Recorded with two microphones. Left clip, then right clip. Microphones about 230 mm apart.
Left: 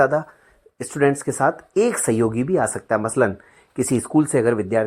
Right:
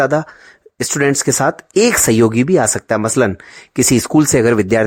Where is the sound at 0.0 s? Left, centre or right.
Right.